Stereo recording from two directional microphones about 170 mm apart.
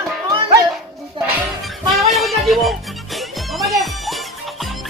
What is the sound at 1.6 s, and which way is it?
Music, centre (ahead or behind).